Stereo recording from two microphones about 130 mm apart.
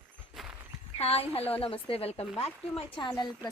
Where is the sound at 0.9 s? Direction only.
50° left (ahead or behind); by 3.5 s 35° left (ahead or behind).